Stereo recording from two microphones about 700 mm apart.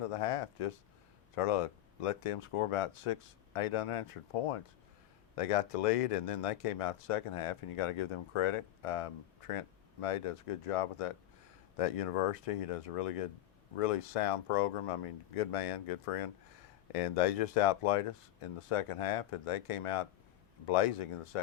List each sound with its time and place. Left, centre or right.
0.1 s speech: left